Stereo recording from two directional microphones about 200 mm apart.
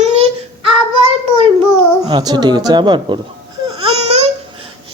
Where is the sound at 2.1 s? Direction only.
20° right (ahead or behind).